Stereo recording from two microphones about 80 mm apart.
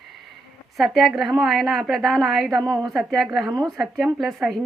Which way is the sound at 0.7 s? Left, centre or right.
Centre.